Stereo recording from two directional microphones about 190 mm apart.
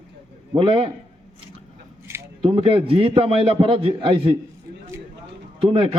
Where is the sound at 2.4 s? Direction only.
30° right (ahead or behind).